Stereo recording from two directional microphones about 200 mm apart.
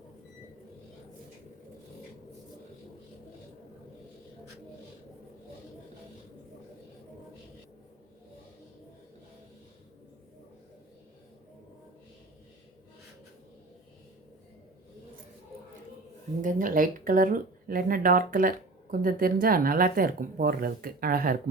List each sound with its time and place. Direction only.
16.4 s speech: 40° right (ahead or behind)